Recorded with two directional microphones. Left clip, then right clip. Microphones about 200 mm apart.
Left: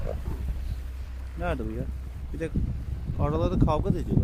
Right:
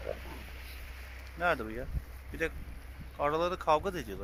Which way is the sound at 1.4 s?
5° left (ahead or behind).